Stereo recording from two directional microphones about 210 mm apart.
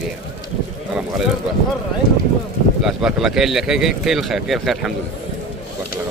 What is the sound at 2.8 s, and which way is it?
Speech, 5° right (ahead or behind).